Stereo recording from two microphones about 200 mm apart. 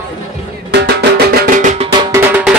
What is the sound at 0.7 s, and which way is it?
Music, 55° right (ahead or behind).